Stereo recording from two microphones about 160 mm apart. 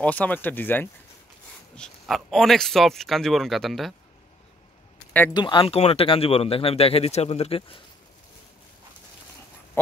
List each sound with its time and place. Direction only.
0.0 s speech: 10° left (ahead or behind)
1.8 s a man's voice: centre (ahead or behind)
5.3 s speech: 30° left (ahead or behind)